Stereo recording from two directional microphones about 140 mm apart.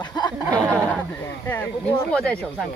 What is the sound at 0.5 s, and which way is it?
Speech, 10° left (ahead or behind).